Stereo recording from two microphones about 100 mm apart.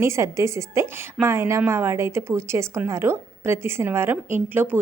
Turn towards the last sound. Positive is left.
turn(degrees=-20)  # may be behind; listen again after turning